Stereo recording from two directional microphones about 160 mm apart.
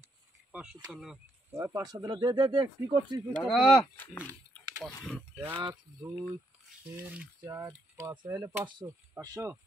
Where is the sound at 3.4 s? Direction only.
Centre (ahead or behind).